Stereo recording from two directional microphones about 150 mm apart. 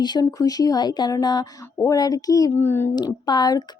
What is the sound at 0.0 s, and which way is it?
Speech, 30° left (ahead or behind).